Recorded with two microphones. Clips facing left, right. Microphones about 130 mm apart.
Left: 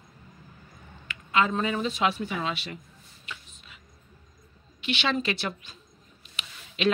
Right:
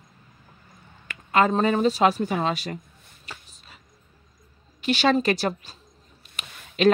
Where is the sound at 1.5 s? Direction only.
40° right (ahead or behind).